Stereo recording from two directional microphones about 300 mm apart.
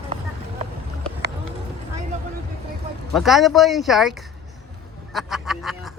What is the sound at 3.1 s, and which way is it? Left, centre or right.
Speech, centre.